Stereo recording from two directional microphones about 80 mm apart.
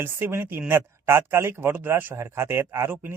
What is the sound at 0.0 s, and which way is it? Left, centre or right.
A woman's voice, right.